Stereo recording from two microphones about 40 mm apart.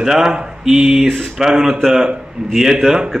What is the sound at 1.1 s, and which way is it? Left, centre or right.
Speech, centre.